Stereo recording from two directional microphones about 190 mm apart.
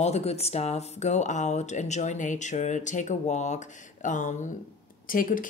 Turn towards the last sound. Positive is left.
turn(degrees=45)  # may be behind; listen again after turning